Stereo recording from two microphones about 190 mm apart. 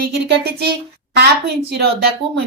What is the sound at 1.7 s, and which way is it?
Speech, 60° right (ahead or behind).